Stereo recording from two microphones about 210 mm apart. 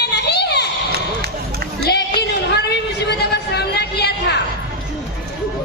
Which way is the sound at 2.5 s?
55° left (ahead or behind).